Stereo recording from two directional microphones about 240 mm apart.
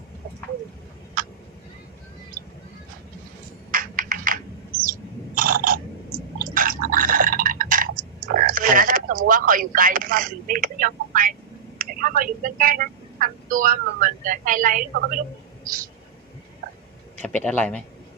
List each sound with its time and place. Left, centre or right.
1.2 s fowl: right
3.7 s computer keyboard: right
4.8 s bird: right
6.4 s a sound: right
11.8 s speech: right
15.6 s a sound: right
17.2 s a man's voice: centre